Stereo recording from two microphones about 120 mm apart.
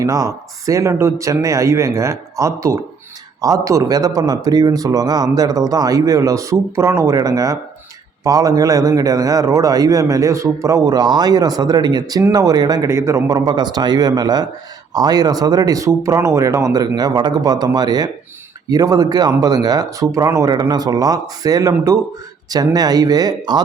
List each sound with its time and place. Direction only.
0.0 s speech: 25° right (ahead or behind)